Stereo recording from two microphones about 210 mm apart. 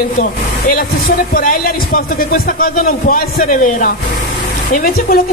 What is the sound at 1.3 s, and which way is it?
Speech, 40° left (ahead or behind).